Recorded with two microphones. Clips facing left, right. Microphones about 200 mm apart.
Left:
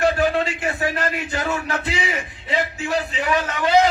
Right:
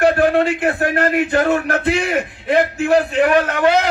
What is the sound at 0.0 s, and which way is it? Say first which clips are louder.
A man's voice: right 5 dB; 60° right (ahead or behind).